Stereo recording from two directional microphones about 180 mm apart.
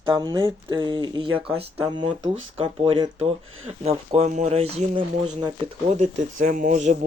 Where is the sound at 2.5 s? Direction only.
30° right (ahead or behind).